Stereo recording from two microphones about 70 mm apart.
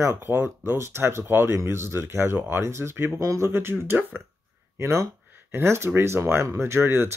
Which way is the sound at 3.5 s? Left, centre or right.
Right.